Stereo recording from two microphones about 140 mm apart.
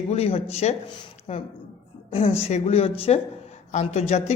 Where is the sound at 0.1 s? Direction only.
45° left (ahead or behind).